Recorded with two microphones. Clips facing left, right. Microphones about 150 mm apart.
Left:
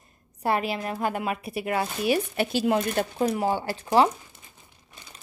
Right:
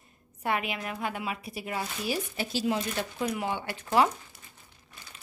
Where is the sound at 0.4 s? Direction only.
35° left (ahead or behind).